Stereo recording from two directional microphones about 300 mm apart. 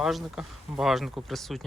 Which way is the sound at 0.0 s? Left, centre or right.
Centre.